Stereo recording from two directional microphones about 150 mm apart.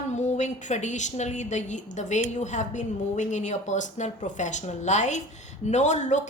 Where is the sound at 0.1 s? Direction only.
50° left (ahead or behind).